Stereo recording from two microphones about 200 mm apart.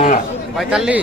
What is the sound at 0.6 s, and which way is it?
Speech, 5° right (ahead or behind).